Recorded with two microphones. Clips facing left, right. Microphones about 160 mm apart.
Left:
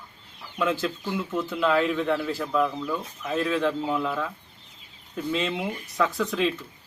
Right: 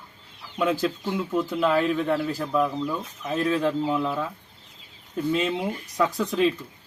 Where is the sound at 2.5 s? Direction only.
10° right (ahead or behind).